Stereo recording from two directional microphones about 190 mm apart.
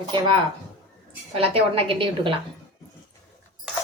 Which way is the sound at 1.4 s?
30° right (ahead or behind).